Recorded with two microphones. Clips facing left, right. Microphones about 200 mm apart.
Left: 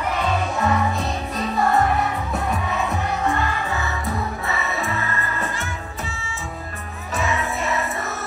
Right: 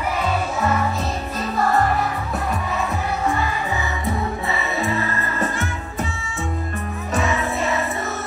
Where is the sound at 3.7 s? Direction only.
15° right (ahead or behind).